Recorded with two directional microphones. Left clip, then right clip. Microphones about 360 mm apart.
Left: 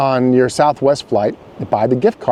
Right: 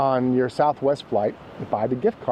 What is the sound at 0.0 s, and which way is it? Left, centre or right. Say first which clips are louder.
Speech: left 7 dB; left.